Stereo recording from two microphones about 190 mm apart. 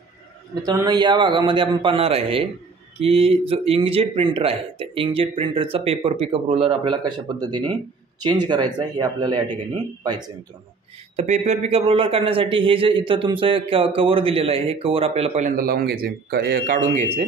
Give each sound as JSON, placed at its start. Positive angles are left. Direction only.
{"t": 0.6, "sound": "a man's voice", "side_deg": -20}
{"t": 11.1, "sound": "a man's voice", "side_deg": -35}